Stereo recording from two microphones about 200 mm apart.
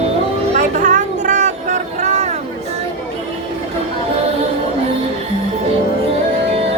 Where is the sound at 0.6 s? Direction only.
40° right (ahead or behind).